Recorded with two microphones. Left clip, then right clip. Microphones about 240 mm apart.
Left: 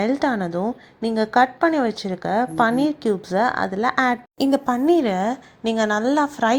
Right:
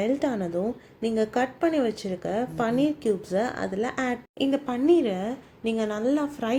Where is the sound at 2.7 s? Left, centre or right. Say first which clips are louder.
Left 4 dB; left.